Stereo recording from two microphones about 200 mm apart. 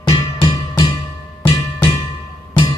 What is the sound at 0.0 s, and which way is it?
Music, 20° left (ahead or behind).